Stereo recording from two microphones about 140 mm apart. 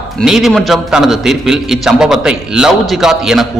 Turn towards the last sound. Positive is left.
turn(degrees=-5)  # may be behind; listen again after turning